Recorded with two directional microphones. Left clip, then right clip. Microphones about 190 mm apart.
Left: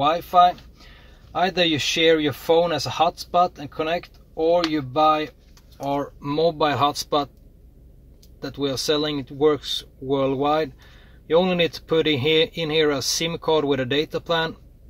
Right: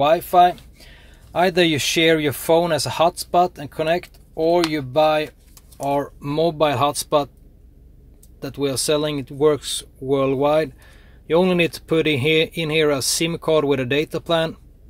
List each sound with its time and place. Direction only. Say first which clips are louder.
0.0 s a man's voice: right 2 dB; 40° right (ahead or behind)
5.8 s speech: right 4 dB; 30° right (ahead or behind)
8.4 s a man's voice: right 2 dB; 30° right (ahead or behind)